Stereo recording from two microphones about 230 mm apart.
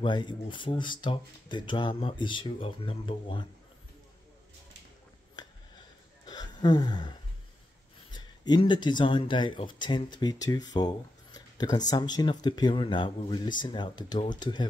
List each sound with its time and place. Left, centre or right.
0.0 s speech: centre
5.4 s a sound: centre
8.1 s speech: centre